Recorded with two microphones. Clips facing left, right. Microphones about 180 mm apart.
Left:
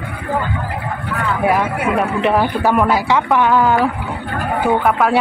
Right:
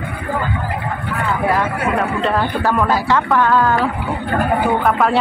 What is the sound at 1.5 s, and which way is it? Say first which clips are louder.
Speech: left 2 dB; 15° left (ahead or behind).